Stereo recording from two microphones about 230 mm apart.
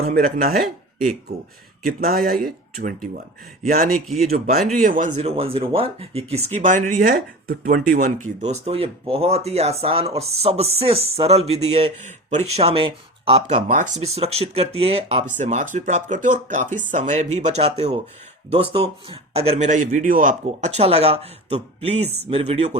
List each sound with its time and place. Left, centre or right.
0.0 s speech: right
1.9 s speech: right